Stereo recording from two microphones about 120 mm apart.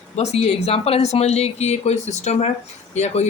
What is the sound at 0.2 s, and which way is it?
Speech, 65° left (ahead or behind).